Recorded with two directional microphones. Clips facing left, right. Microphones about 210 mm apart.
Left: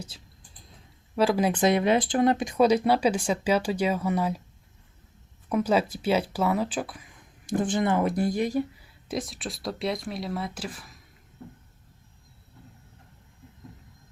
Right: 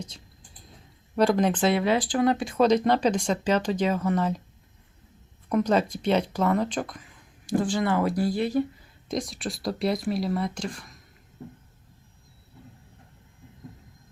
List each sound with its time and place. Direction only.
1.1 s speech: 5° left (ahead or behind)
5.5 s speech: 5° left (ahead or behind)
7.4 s speech: 20° left (ahead or behind)
9.0 s speech: centre (ahead or behind)